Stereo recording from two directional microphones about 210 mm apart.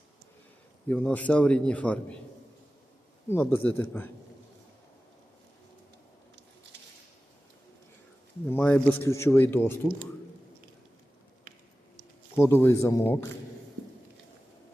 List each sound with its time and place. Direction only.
0.9 s a man's voice: 5° left (ahead or behind)
3.2 s a man's voice: 10° left (ahead or behind)
8.4 s a man's voice: 10° left (ahead or behind)
12.4 s a man's voice: 10° left (ahead or behind)